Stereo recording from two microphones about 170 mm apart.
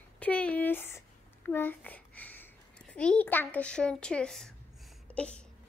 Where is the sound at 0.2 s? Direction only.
10° left (ahead or behind).